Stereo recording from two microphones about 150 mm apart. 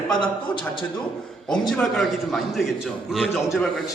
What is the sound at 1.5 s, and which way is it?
A man's voice, 5° left (ahead or behind).